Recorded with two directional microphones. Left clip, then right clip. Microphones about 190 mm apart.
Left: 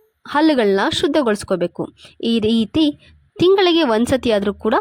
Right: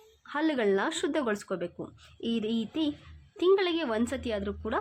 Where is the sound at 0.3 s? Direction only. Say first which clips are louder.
Left 13 dB; 40° left (ahead or behind).